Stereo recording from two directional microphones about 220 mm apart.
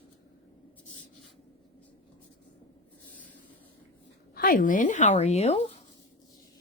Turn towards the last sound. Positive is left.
turn(degrees=30)  # may be behind; listen again after turning